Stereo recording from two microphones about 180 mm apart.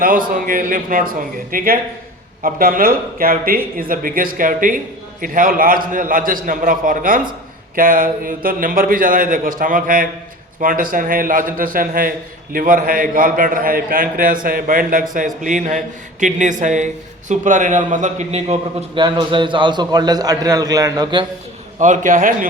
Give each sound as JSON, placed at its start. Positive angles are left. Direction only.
{"t": 0.0, "sound": "speech", "side_deg": -50}
{"t": 18.9, "sound": "a man's voice", "side_deg": -25}
{"t": 21.8, "sound": "speech", "side_deg": -45}